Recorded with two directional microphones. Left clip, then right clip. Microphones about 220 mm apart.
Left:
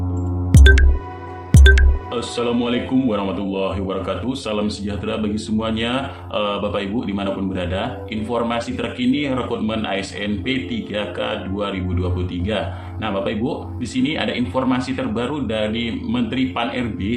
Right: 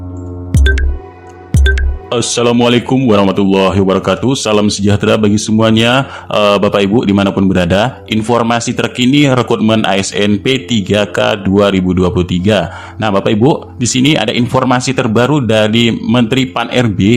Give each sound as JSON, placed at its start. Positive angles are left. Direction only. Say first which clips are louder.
{"t": 0.5, "sound": "music", "louder": "even", "side_deg": 0}
{"t": 2.0, "sound": "speech", "louder": "right 12 dB", "side_deg": -50}